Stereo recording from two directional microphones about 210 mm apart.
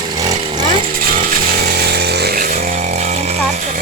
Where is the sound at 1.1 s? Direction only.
45° right (ahead or behind).